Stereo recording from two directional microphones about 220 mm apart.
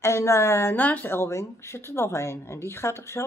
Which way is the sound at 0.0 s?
15° left (ahead or behind).